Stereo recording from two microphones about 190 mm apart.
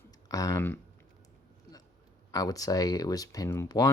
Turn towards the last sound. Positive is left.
turn(degrees=20)  # may be behind; listen again after turning